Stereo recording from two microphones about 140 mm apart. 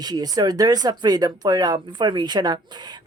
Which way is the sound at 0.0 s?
30° right (ahead or behind).